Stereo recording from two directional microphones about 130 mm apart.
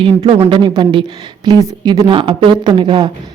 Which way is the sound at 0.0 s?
40° right (ahead or behind).